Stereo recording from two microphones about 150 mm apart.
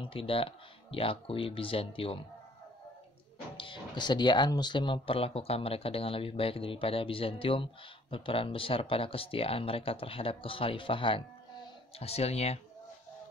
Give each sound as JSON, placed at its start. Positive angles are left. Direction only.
{"t": 0.0, "sound": "speech", "side_deg": 35}
{"t": 3.5, "sound": "speech", "side_deg": 35}